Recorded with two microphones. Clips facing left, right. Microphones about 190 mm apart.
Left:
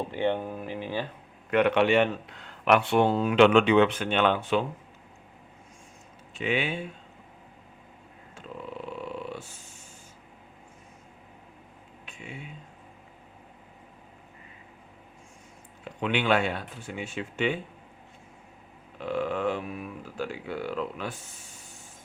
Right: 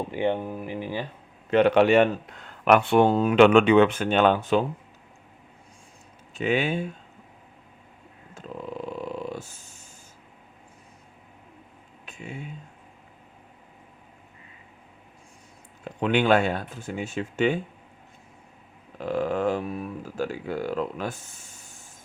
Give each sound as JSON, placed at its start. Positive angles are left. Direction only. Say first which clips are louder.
{"t": 0.1, "sound": "speech", "louder": "right 3 dB", "side_deg": -15}
{"t": 1.5, "sound": "speech", "louder": "right 4 dB", "side_deg": -30}
{"t": 6.3, "sound": "speech", "louder": "right 4 dB", "side_deg": -45}
{"t": 8.4, "sound": "a sound", "louder": "right 3 dB", "side_deg": -45}
{"t": 8.9, "sound": "purr", "louder": "right 2 dB", "side_deg": -40}
{"t": 12.0, "sound": "a sound", "louder": "right 4 dB", "side_deg": -45}
{"t": 15.8, "sound": "speech", "louder": "right 5 dB", "side_deg": -40}
{"t": 18.9, "sound": "speech", "louder": "right 3 dB", "side_deg": -40}